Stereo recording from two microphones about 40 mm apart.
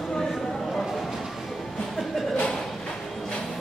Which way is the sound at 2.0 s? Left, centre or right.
Centre.